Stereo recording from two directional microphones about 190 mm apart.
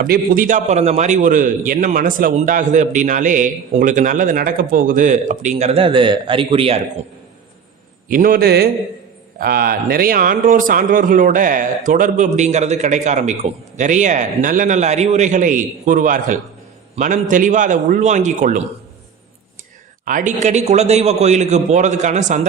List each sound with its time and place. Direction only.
0.0 s a man's voice: 45° right (ahead or behind); by 6.8 s 30° right (ahead or behind)
8.1 s a man's voice: 50° right (ahead or behind)
20.1 s a man's voice: 45° right (ahead or behind)